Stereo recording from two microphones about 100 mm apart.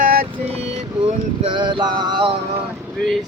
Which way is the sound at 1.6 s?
50° right (ahead or behind).